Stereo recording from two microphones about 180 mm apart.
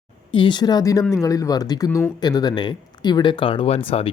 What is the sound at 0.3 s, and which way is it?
Speech, 25° left (ahead or behind).